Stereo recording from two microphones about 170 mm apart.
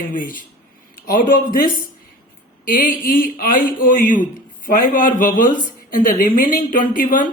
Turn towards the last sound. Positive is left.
turn(degrees=50)  # may be behind; listen again after turning